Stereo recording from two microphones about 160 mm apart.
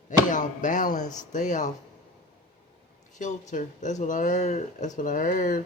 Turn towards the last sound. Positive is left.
turn(degrees=55)  # may be behind; listen again after turning